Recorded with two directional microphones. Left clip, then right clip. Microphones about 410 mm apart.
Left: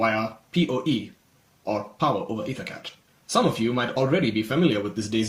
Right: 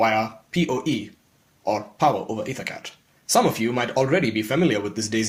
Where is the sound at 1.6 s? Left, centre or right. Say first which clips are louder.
Right 4 dB; centre.